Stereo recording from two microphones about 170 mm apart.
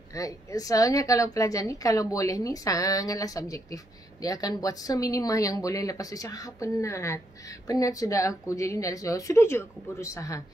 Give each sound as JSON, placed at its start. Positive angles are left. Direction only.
{"t": 0.1, "sound": "a woman's voice", "side_deg": 20}